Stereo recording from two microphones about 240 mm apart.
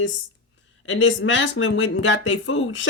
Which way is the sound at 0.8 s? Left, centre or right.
Left.